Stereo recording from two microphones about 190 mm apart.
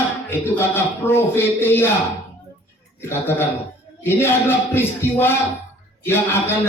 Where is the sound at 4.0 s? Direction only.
10° left (ahead or behind).